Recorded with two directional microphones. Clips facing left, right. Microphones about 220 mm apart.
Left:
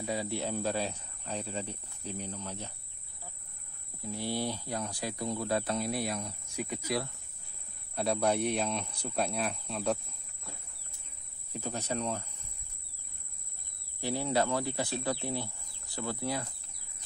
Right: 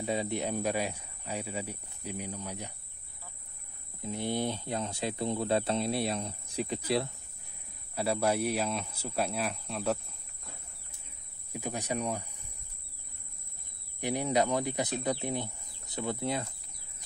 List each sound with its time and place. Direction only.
0.0 s speech: 20° right (ahead or behind)
4.0 s speech: 20° right (ahead or behind)
7.9 s speech: 5° right (ahead or behind)
11.5 s speech: 15° right (ahead or behind)
14.0 s speech: 20° right (ahead or behind)